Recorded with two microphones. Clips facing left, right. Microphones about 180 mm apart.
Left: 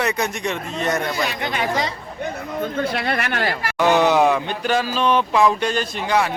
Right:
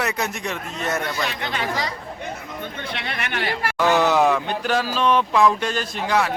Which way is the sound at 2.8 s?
50° left (ahead or behind).